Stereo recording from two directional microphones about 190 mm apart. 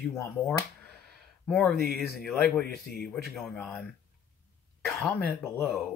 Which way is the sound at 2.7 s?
55° left (ahead or behind).